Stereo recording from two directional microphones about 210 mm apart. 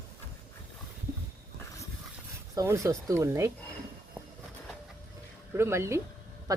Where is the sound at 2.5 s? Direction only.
15° right (ahead or behind).